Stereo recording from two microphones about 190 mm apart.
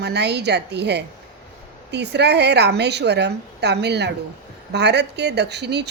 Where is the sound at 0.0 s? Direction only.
60° right (ahead or behind).